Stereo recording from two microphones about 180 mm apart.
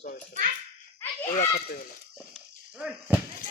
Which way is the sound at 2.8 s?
10° right (ahead or behind).